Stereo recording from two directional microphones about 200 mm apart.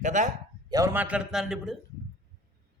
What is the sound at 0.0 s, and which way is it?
Speech, 40° right (ahead or behind).